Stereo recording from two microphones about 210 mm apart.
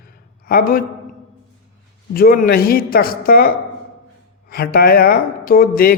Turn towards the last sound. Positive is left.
turn(degrees=45)  # may be behind; listen again after turning